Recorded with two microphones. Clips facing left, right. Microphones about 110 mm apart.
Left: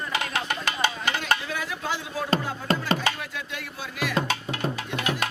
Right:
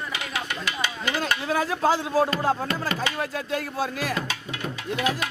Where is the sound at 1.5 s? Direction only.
40° right (ahead or behind).